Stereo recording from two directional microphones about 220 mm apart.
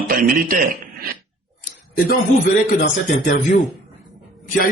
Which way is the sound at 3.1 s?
50° left (ahead or behind).